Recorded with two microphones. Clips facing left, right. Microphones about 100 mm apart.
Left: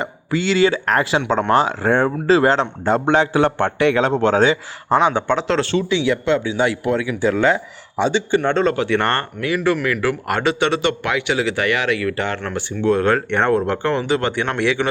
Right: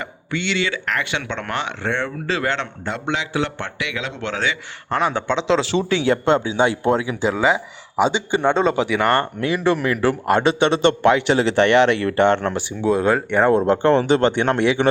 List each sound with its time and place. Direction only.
0.0 s a man's voice: 35° left (ahead or behind)
4.9 s speech: 15° left (ahead or behind)
5.9 s speech: 40° right (ahead or behind)
6.6 s a man's voice: 25° right (ahead or behind)
7.3 s speech: 10° right (ahead or behind)
9.4 s a man's voice: 25° right (ahead or behind); by 13.5 s 5° right (ahead or behind)
13.5 s a man's voice: 20° right (ahead or behind)